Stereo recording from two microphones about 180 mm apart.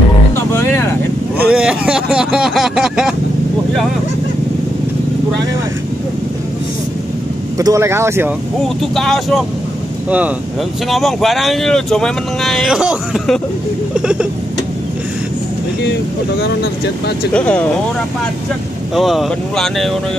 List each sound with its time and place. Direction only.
0.4 s music: 15° left (ahead or behind)
1.5 s speech: 5° right (ahead or behind)
7.5 s speech: 15° right (ahead or behind)
8.6 s speech: centre (ahead or behind)
15.8 s speech: 70° left (ahead or behind)
17.3 s speech: 5° left (ahead or behind)
18.9 s speech: centre (ahead or behind)